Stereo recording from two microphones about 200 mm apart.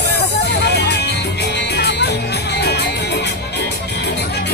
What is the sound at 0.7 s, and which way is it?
Music, 55° left (ahead or behind).